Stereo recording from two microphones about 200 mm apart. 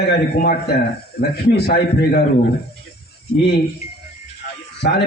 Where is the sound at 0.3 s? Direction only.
45° left (ahead or behind).